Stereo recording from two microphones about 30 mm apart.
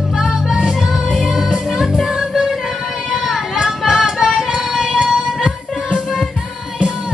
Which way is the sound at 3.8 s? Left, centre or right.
Centre.